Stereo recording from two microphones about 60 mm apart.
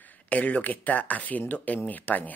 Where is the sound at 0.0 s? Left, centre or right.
Left.